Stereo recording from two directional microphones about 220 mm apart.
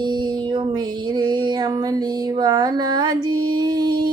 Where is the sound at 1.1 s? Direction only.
20° right (ahead or behind).